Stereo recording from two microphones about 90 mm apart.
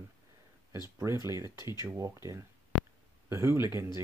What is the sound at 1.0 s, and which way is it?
Speech, 35° right (ahead or behind).